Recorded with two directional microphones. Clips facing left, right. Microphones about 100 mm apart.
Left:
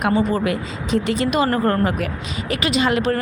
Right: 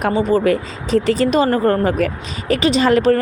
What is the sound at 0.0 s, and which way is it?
A woman's voice, 30° right (ahead or behind).